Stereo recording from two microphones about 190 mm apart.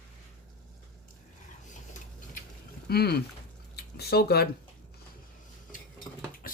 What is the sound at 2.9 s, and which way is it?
Speech, 55° left (ahead or behind).